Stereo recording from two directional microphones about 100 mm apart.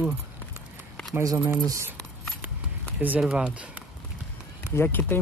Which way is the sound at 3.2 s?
10° right (ahead or behind).